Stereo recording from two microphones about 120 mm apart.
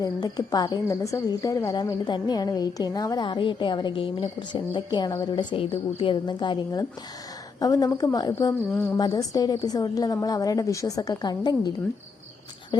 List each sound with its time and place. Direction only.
0.0 s speech: 30° left (ahead or behind)
8.7 s speech: 15° left (ahead or behind)
9.0 s speech: 30° left (ahead or behind)